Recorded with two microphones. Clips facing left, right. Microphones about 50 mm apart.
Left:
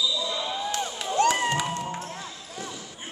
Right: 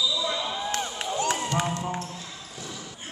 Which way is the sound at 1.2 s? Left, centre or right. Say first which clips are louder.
Left 6 dB; left.